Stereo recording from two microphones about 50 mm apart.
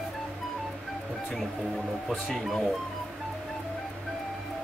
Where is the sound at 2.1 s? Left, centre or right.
Centre.